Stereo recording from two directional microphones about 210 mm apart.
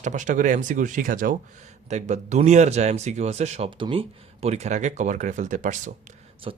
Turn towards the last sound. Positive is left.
turn(degrees=-25)  # may be behind; listen again after turning